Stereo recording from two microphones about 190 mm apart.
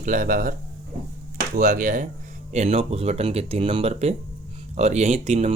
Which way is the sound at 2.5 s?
35° right (ahead or behind).